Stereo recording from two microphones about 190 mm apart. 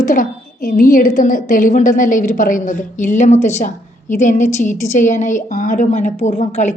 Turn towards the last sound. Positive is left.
turn(degrees=40)  # may be behind; listen again after turning